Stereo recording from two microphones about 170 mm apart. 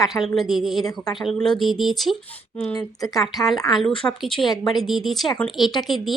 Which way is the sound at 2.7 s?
20° left (ahead or behind).